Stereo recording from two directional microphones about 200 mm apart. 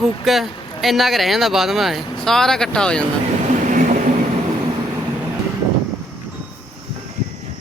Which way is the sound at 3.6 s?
40° right (ahead or behind).